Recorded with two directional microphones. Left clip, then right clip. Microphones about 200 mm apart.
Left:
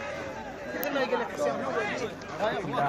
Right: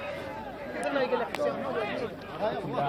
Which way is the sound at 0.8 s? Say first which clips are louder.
Right 1 dB; 55° left (ahead or behind).